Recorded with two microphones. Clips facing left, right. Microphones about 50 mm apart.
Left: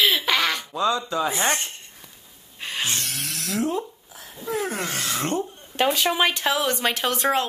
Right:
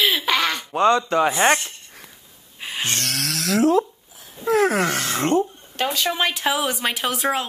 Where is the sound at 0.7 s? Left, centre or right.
Right.